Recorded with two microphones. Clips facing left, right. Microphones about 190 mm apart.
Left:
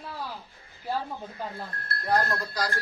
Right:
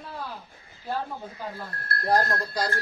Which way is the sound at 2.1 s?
35° right (ahead or behind).